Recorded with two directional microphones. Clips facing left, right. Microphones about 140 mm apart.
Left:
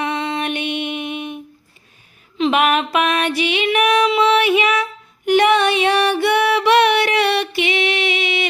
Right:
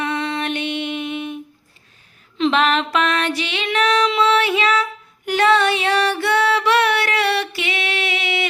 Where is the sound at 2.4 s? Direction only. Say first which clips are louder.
Left 1 dB; 10° left (ahead or behind).